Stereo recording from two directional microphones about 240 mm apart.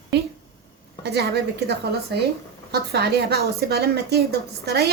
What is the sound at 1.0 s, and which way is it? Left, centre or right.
A woman's voice, right.